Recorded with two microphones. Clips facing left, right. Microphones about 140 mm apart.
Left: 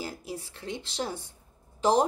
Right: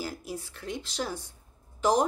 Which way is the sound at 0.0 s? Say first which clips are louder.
Right 1 dB; 25° left (ahead or behind).